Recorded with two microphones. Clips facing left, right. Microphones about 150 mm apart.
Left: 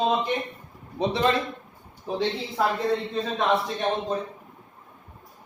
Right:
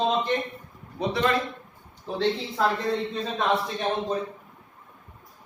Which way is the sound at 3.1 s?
Centre (ahead or behind).